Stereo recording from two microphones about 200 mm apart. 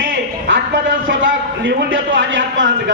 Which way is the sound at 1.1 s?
70° right (ahead or behind).